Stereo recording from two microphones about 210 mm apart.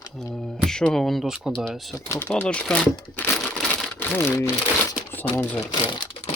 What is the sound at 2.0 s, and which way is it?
Speech, 15° left (ahead or behind).